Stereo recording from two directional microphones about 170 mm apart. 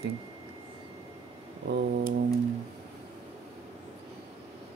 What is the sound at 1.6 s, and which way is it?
Speech, 75° right (ahead or behind).